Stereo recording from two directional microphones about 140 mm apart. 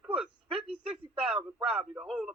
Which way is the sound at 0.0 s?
5° right (ahead or behind).